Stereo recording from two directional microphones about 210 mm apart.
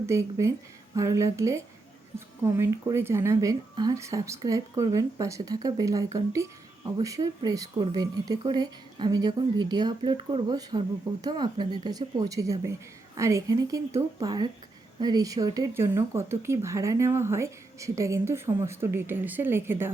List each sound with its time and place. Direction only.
0.0 s speech: 15° right (ahead or behind)